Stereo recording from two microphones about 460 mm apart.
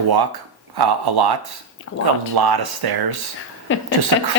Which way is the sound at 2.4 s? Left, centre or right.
Right.